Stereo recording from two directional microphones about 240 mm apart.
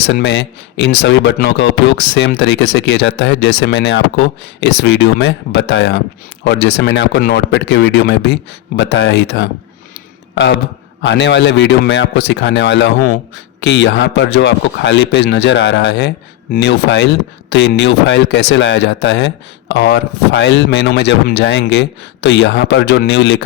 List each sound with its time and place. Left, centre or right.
0.1 s speech: left
11.0 s speech: left